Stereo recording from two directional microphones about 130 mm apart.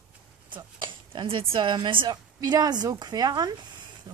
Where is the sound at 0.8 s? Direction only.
40° right (ahead or behind).